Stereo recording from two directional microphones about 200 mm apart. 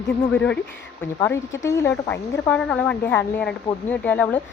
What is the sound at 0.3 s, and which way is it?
Speech, 5° left (ahead or behind).